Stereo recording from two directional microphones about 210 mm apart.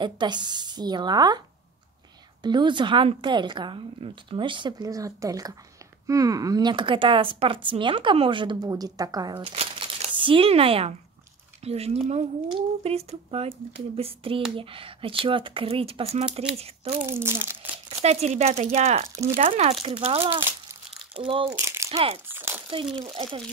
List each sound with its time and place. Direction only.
0.0 s speech: 20° right (ahead or behind)
2.4 s speech: 20° right (ahead or behind)
17.1 s crumpling: 10° right (ahead or behind)
18.0 s speech: 30° right (ahead or behind)
20.3 s crumpling: 10° right (ahead or behind)
21.2 s speech: 25° right (ahead or behind)
21.5 s speech: 15° right (ahead or behind)
21.8 s speech: 30° right (ahead or behind)
22.3 s crumpling: 10° right (ahead or behind)
22.9 s speech: 25° right (ahead or behind)